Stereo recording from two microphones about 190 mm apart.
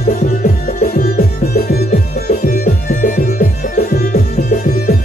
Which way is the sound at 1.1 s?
55° left (ahead or behind).